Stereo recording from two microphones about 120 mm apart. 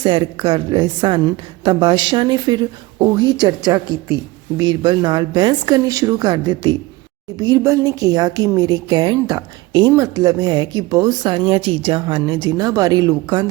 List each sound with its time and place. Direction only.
0.0 s a woman's voice: 40° right (ahead or behind)